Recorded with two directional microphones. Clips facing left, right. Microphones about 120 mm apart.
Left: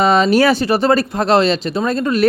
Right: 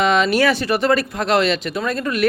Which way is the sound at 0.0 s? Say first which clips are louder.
Left 4 dB; 35° left (ahead or behind).